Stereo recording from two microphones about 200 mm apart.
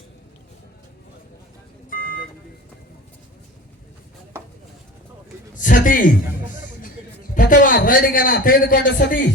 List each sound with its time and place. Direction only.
1.9 s vehicle: 45° left (ahead or behind)
4.3 s chopping: 10° right (ahead or behind)
5.5 s a man's voice: 40° left (ahead or behind)
7.3 s a man's voice: 40° left (ahead or behind); by 9.3 s 60° left (ahead or behind)